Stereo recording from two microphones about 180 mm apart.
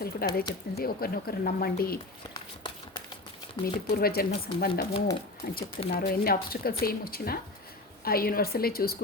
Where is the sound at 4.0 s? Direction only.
55° left (ahead or behind).